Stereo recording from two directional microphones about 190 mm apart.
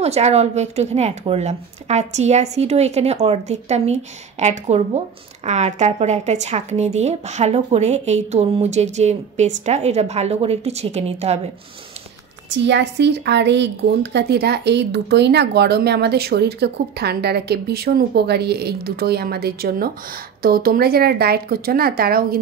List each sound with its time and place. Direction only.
0.0 s speech: 35° right (ahead or behind)
12.4 s speech: 70° right (ahead or behind); by 22.4 s 50° right (ahead or behind)